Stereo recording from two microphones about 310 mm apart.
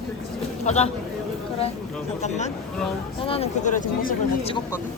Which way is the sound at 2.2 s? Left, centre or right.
Left.